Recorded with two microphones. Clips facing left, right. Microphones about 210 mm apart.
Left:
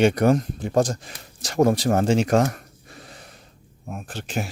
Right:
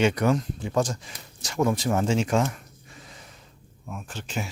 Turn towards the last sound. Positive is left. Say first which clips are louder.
# left 4 dB
turn(degrees=55)  # may be behind; listen again after turning